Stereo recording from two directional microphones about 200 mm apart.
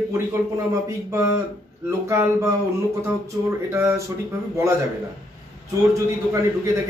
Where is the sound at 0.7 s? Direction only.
15° right (ahead or behind).